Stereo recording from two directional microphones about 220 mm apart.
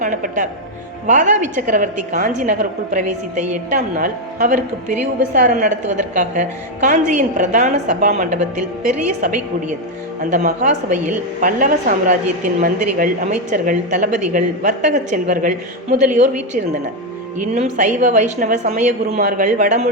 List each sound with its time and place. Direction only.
0.0 s a woman's voice: 35° right (ahead or behind)
10.2 s a woman's voice: 35° right (ahead or behind)